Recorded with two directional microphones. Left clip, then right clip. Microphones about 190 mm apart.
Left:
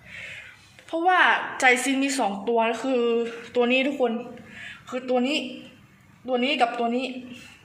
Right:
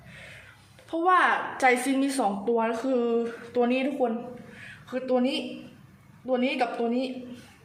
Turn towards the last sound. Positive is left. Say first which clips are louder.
# left 4 dB
turn(degrees=20)  # may be behind; listen again after turning